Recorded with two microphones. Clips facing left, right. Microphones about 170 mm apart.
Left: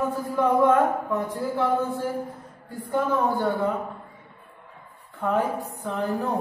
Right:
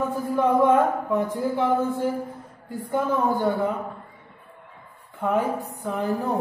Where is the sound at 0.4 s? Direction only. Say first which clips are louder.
Right 1 dB; 20° right (ahead or behind).